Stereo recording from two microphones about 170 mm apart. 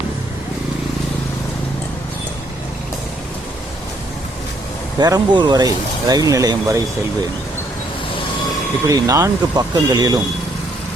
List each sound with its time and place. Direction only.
4.9 s speech: 20° right (ahead or behind)
8.9 s speech: 20° right (ahead or behind)